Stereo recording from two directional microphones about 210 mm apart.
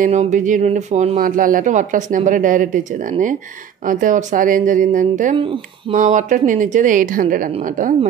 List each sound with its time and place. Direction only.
0.0 s speech: 35° right (ahead or behind)